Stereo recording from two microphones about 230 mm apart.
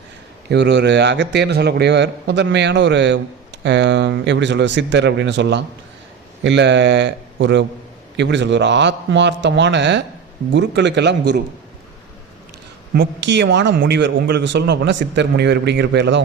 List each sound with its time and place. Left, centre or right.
0.5 s a man's voice: right
12.9 s a man's voice: right